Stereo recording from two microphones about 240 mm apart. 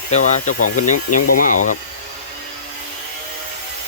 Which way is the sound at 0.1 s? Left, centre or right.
Left.